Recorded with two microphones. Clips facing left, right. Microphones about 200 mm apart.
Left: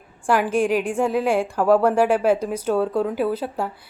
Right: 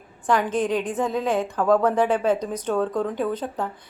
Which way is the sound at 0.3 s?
10° left (ahead or behind).